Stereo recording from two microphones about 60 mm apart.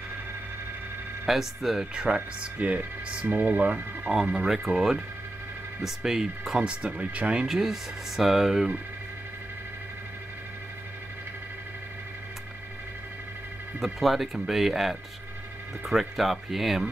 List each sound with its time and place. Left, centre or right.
1.2 s speech: centre
2.0 s speech: right
4.1 s speech: centre
7.4 s speech: centre
13.7 s speech: centre